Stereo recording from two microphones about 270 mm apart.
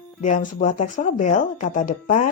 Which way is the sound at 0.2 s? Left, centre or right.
Left.